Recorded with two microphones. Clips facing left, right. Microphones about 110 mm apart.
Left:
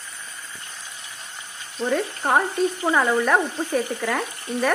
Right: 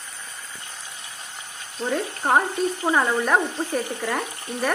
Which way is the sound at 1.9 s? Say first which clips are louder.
Left 1 dB; 5° right (ahead or behind).